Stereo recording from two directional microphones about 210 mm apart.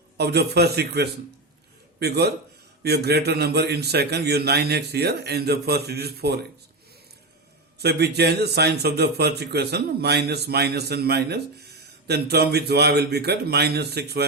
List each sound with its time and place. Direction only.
0.2 s a man's voice: 50° right (ahead or behind)
7.8 s a man's voice: 50° right (ahead or behind)